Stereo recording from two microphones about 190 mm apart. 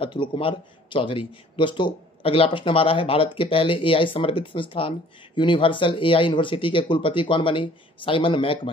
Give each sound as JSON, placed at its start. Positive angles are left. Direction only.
{"t": 0.0, "sound": "a man's voice", "side_deg": 25}